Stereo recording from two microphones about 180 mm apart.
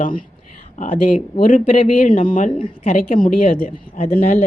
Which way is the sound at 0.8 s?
45° left (ahead or behind).